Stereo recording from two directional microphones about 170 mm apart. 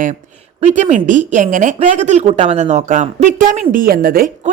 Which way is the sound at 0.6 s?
40° right (ahead or behind).